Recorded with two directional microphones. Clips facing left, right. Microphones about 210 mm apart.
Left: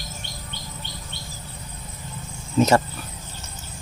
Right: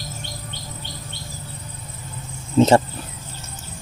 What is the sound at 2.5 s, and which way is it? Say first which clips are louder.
Speech: right 4 dB; 25° right (ahead or behind).